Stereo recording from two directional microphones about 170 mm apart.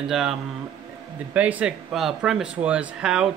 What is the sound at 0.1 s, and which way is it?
Speech, centre (ahead or behind).